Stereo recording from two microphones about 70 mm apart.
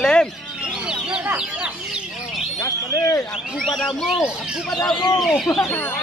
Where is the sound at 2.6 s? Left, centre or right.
Left.